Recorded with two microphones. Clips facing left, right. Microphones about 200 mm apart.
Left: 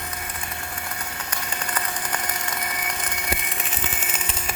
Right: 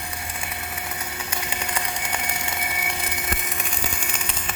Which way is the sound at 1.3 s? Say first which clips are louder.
Right 2 dB; 10° right (ahead or behind).